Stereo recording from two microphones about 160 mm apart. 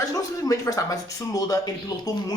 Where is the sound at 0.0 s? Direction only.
20° left (ahead or behind).